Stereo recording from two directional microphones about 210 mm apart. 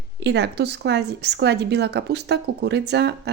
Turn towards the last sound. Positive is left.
turn(degrees=-55)  # may be behind; listen again after turning